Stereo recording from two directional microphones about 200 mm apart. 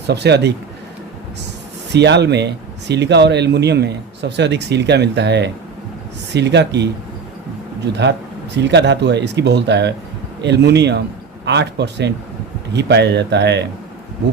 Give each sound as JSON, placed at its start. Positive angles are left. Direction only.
{"t": 0.1, "sound": "speech", "side_deg": -55}
{"t": 1.9, "sound": "speech", "side_deg": -60}
{"t": 8.5, "sound": "speech", "side_deg": -60}